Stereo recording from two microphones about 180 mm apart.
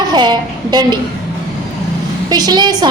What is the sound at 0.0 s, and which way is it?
Speech, 25° right (ahead or behind).